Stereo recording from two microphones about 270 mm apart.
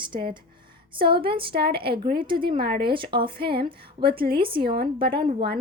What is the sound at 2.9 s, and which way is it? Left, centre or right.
Speech, centre.